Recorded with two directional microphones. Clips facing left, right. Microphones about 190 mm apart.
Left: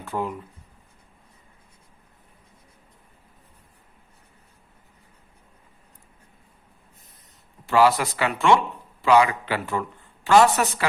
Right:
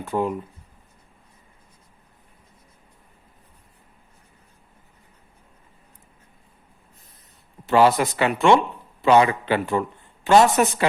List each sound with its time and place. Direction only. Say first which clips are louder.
0.0 s speech: right 4 dB; 15° right (ahead or behind)
7.7 s speech: right 2 dB; 20° right (ahead or behind)